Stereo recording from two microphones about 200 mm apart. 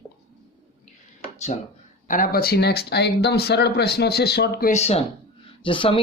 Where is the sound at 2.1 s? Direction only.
45° left (ahead or behind).